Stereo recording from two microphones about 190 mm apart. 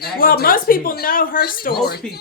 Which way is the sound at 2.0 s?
5° left (ahead or behind).